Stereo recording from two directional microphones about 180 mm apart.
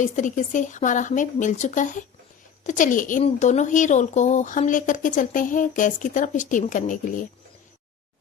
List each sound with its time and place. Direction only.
0.0 s speech: 45° left (ahead or behind)